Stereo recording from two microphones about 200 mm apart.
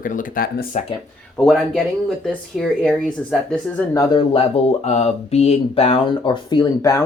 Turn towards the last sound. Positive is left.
turn(degrees=15)  # may be behind; listen again after turning